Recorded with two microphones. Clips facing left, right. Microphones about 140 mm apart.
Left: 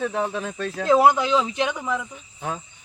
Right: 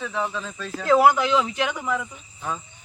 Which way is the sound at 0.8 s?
20° left (ahead or behind).